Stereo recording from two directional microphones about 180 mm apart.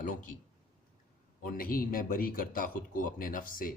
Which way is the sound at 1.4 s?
50° left (ahead or behind).